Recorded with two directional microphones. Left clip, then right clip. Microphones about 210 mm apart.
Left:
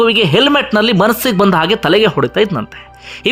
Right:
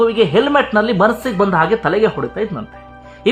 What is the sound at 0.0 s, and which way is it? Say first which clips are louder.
A man's voice: left 3 dB; 20° left (ahead or behind).